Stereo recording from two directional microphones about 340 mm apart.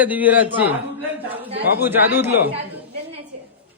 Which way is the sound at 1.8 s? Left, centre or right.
Centre.